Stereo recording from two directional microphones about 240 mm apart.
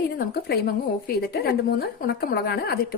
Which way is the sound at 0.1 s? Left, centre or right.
Left.